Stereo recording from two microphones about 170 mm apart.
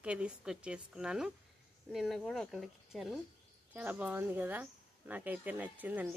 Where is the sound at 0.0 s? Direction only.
5° right (ahead or behind).